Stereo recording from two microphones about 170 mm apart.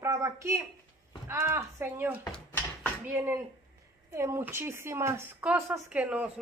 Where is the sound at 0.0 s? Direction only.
15° right (ahead or behind).